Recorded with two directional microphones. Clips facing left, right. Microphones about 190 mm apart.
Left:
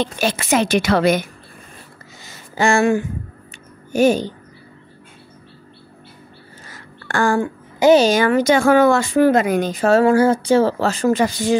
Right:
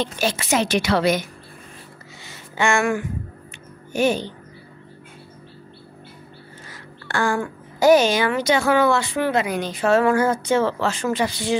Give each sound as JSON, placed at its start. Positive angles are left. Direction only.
{"t": 0.0, "sound": "speech", "side_deg": 60}
{"t": 2.2, "sound": "a sound", "side_deg": 35}
{"t": 3.9, "sound": "speech", "side_deg": 40}
{"t": 6.7, "sound": "a sound", "side_deg": 45}
{"t": 7.3, "sound": "a woman's voice", "side_deg": 25}
{"t": 8.1, "sound": "speech", "side_deg": 45}